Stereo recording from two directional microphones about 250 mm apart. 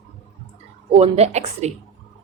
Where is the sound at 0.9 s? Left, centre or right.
Right.